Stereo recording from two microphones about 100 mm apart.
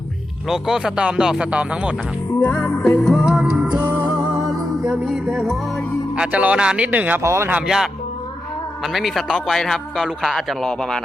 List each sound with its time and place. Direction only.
0.4 s speech: 5° right (ahead or behind)
2.4 s music: 15° left (ahead or behind)
2.8 s a man's voice: 5° left (ahead or behind)
3.3 s music: 15° right (ahead or behind)
4.9 s a man's voice: 5° right (ahead or behind)
6.1 s speech: 15° right (ahead or behind)
7.2 s speech: 25° right (ahead or behind)
8.8 s a man's voice: centre (ahead or behind)